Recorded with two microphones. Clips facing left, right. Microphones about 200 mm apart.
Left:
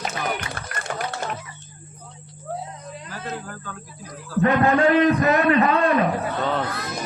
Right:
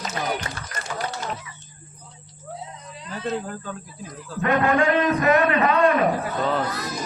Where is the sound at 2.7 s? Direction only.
50° left (ahead or behind).